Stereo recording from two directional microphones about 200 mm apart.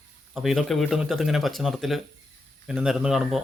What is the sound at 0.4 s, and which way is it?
Speech, centre (ahead or behind).